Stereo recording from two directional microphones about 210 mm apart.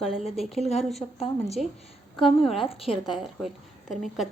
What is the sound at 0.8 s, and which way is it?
Speech, centre (ahead or behind).